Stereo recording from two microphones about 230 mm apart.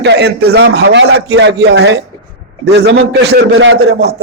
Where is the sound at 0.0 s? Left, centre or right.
Right.